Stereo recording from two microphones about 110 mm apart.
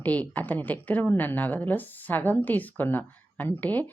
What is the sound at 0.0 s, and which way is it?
Speech, 15° left (ahead or behind).